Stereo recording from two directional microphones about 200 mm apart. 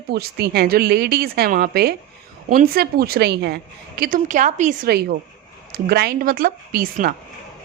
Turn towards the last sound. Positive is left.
turn(degrees=-45)  # may be behind; listen again after turning